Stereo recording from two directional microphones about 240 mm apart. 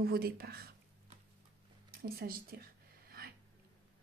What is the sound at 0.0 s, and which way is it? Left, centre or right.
Speech, right.